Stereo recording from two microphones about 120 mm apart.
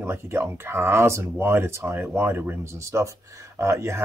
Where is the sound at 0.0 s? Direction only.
20° right (ahead or behind).